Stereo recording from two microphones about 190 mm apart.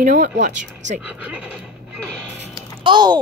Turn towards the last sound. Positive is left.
turn(degrees=-25)  # may be behind; listen again after turning